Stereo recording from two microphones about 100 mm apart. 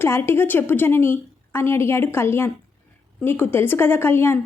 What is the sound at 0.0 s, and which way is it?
A woman's voice, 25° left (ahead or behind).